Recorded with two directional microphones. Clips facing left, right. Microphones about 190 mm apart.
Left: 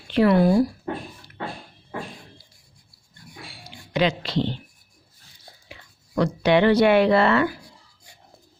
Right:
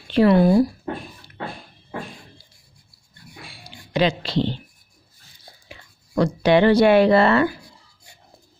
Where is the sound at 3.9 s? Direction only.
30° right (ahead or behind).